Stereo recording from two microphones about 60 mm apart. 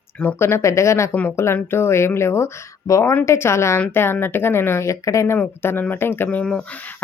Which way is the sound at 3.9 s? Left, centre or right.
Left.